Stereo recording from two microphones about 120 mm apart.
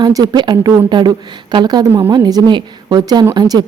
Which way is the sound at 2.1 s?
35° right (ahead or behind).